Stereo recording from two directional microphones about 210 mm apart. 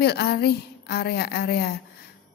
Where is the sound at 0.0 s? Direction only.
50° left (ahead or behind).